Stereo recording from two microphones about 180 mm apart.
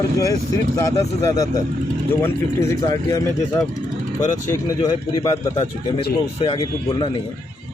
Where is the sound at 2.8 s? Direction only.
20° left (ahead or behind).